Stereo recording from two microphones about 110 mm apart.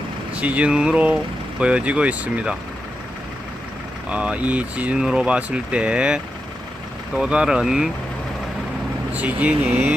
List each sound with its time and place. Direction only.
0.3 s speech: 10° right (ahead or behind)
4.1 s speech: 10° right (ahead or behind)
9.1 s speech: 15° right (ahead or behind)